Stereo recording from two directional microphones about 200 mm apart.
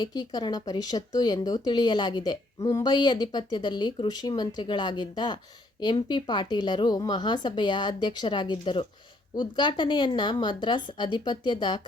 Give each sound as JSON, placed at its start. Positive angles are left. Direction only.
{"t": 0.0, "sound": "speech", "side_deg": 20}